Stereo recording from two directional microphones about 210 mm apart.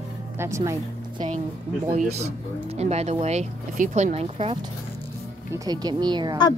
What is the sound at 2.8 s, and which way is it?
A woman's voice, 30° right (ahead or behind).